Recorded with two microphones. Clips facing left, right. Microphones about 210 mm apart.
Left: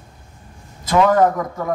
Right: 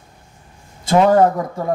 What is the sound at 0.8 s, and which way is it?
Speech, 30° right (ahead or behind).